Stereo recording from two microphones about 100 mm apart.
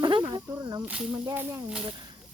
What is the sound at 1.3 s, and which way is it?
Speech, 20° right (ahead or behind).